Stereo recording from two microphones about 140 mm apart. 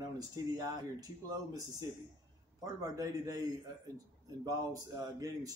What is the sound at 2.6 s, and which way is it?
Speech, 25° right (ahead or behind).